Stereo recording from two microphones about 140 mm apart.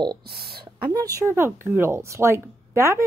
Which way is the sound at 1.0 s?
20° right (ahead or behind).